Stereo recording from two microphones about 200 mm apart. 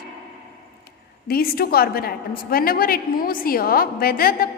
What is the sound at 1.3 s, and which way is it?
A woman's voice, 50° left (ahead or behind).